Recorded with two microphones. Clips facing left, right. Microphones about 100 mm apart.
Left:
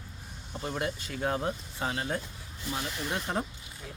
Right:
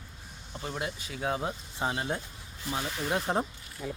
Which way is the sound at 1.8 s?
25° right (ahead or behind).